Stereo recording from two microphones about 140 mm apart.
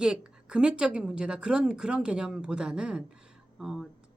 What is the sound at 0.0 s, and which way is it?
A woman's voice, 5° right (ahead or behind).